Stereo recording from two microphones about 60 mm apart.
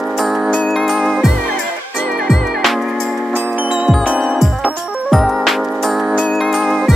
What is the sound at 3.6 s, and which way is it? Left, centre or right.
Music, centre.